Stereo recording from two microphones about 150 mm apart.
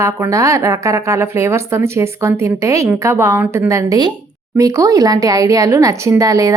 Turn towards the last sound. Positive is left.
turn(degrees=-25)  # may be behind; listen again after turning